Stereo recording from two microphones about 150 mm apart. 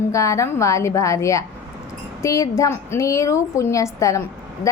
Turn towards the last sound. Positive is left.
turn(degrees=20)  # may be behind; listen again after turning